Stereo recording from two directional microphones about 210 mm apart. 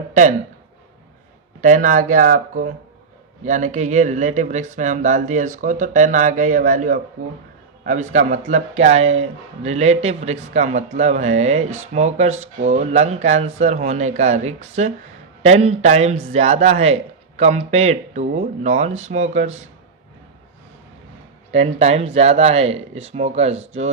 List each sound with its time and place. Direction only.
0.1 s speech: 35° right (ahead or behind)
1.6 s speech: 40° right (ahead or behind)
21.5 s speech: 30° right (ahead or behind)